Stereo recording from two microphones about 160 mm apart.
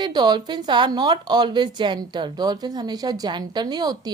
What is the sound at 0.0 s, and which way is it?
A woman's voice, 25° right (ahead or behind).